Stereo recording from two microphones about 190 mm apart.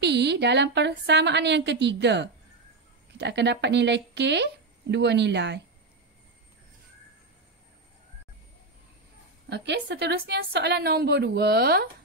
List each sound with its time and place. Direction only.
0.0 s a woman's voice: 60° right (ahead or behind)
9.5 s a woman's voice: 65° right (ahead or behind)